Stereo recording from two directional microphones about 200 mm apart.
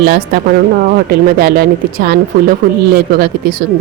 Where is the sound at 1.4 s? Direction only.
50° right (ahead or behind).